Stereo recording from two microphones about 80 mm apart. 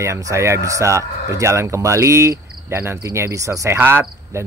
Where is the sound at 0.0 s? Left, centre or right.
Right.